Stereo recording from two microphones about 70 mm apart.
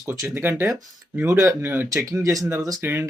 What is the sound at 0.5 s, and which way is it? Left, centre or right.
Speech, right.